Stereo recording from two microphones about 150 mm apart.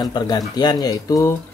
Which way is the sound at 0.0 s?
25° left (ahead or behind).